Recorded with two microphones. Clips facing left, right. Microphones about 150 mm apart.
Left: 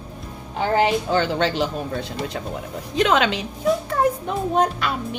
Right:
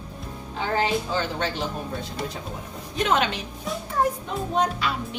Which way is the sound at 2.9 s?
90° left.